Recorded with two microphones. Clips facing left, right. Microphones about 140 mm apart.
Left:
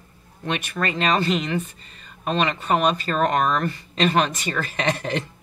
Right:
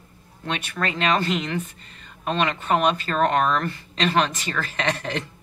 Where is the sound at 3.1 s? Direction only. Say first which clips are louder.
Even; 10° left (ahead or behind).